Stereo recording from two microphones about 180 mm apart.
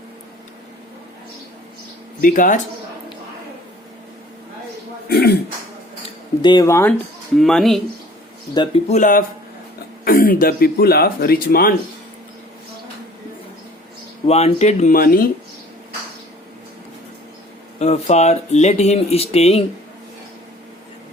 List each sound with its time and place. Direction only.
2.2 s speech: 45° left (ahead or behind)
5.0 s throat clearing: 60° left (ahead or behind)
6.4 s speech: 20° left (ahead or behind)
7.3 s speech: centre (ahead or behind)
8.5 s speech: 35° left (ahead or behind); by 11.7 s 55° left (ahead or behind)
14.3 s speech: 35° left (ahead or behind)
14.9 s speech: 55° left (ahead or behind)
17.7 s speech: 35° left (ahead or behind)